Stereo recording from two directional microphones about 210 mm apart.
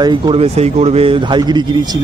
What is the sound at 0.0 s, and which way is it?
Speech, 20° right (ahead or behind).